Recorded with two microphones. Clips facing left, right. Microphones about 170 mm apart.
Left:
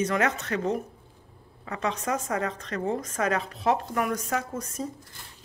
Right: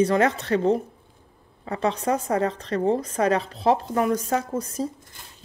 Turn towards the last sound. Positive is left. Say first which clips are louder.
# right 6 dB
turn(degrees=-30)  # may be behind; listen again after turning